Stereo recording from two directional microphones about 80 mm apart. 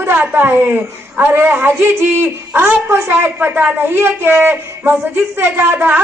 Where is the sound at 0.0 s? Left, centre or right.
Right.